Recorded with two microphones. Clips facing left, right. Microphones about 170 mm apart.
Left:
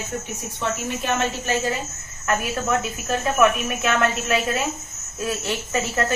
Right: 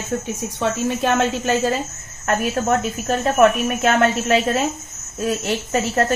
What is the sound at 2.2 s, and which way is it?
Speech, 40° right (ahead or behind).